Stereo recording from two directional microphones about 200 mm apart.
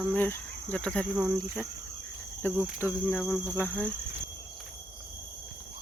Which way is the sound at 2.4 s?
10° left (ahead or behind).